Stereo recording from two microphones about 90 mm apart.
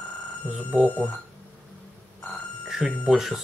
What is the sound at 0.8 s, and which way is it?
Speech, 10° left (ahead or behind).